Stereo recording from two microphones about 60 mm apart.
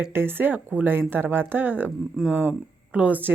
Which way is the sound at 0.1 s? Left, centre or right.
Right.